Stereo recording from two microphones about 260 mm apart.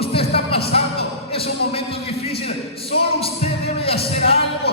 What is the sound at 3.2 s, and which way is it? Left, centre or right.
Music, left.